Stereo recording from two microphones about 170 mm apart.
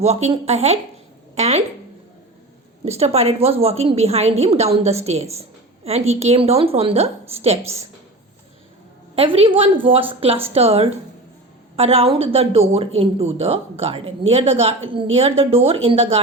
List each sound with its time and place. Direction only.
0.0 s speech: 40° right (ahead or behind)
3.0 s speech: 35° right (ahead or behind)
9.1 s speech: 35° right (ahead or behind)